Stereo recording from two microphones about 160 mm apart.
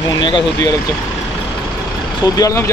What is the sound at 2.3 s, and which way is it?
Speech, 20° left (ahead or behind).